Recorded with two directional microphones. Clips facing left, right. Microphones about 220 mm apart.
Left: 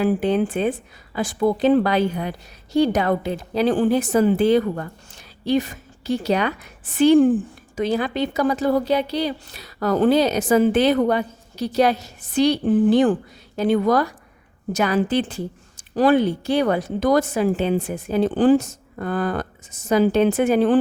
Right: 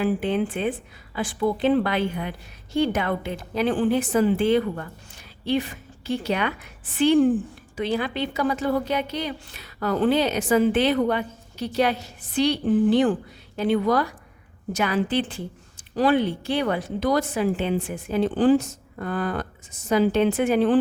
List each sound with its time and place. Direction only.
0.0 s a woman's voice: 40° left (ahead or behind)